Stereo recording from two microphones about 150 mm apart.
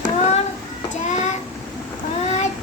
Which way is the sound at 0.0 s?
50° left (ahead or behind).